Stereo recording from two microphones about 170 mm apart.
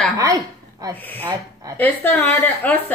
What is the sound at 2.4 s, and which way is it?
Speech, 10° left (ahead or behind).